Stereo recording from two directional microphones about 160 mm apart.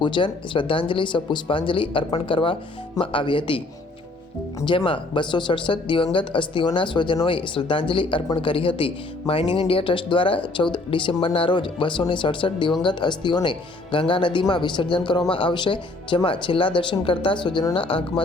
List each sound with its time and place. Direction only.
0.0 s speech: 30° left (ahead or behind)
4.6 s speech: 30° left (ahead or behind)